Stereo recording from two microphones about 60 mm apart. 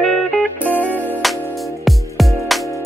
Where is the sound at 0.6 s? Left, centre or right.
Left.